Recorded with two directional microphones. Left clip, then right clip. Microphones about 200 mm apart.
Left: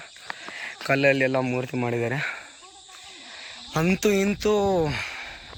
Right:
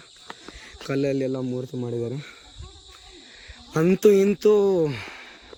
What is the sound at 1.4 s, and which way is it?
Speech, 50° left (ahead or behind).